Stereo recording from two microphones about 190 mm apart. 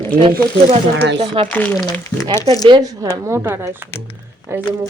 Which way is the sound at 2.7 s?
20° right (ahead or behind).